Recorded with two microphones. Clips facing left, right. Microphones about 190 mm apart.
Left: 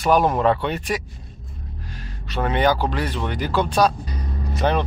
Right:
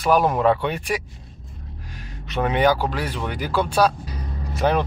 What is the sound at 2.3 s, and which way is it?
Speech, 10° right (ahead or behind).